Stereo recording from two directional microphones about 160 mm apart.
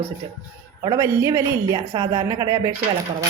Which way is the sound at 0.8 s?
20° right (ahead or behind).